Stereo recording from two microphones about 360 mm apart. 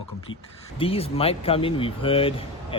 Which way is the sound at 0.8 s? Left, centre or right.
Centre.